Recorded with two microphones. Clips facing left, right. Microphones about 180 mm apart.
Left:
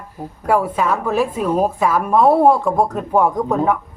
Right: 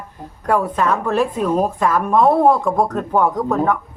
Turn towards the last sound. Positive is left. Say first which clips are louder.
# left 1 dB
turn(degrees=15)  # may be behind; listen again after turning